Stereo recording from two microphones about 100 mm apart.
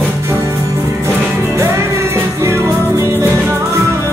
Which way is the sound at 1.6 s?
25° right (ahead or behind).